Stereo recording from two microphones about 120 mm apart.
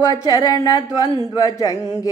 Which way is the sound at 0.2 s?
30° left (ahead or behind).